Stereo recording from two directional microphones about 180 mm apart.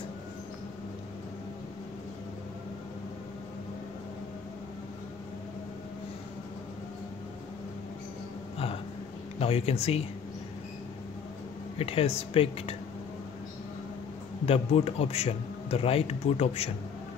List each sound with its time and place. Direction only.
9.4 s a man's voice: 35° left (ahead or behind)
11.8 s a man's voice: 35° left (ahead or behind)
14.4 s a man's voice: 35° left (ahead or behind)